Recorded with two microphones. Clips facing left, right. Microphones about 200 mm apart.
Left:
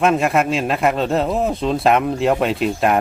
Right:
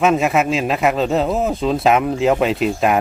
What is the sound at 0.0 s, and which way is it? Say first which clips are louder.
Speech: right 1 dB; centre (ahead or behind).